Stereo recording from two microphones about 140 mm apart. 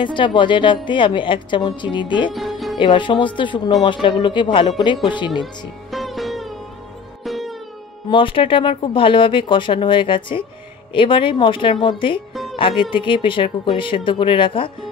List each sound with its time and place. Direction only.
0.0 s a woman's voice: 35° left (ahead or behind)
2.3 s music: centre (ahead or behind)
2.8 s a woman's voice: 35° left (ahead or behind)
5.4 s music: centre (ahead or behind)
8.1 s a woman's voice: 35° left (ahead or behind)